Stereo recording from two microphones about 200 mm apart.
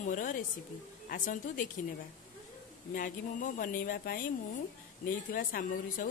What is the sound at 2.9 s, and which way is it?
Speech, 45° left (ahead or behind).